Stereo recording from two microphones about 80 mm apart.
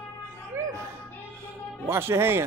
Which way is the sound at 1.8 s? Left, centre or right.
Right.